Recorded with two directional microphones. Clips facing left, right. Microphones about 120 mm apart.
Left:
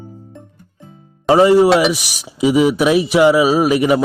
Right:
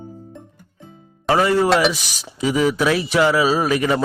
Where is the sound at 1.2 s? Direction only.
20° left (ahead or behind).